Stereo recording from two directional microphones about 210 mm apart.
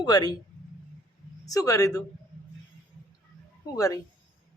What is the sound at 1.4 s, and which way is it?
Speech, 15° left (ahead or behind).